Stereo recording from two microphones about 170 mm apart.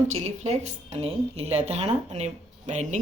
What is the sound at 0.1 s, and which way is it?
A woman's voice, 40° right (ahead or behind).